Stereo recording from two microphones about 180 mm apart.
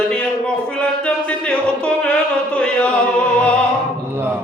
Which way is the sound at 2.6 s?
5° left (ahead or behind).